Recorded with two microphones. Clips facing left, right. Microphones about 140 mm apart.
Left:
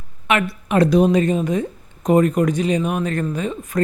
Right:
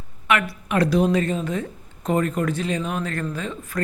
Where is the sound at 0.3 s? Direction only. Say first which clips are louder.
Left 3 dB; 25° left (ahead or behind).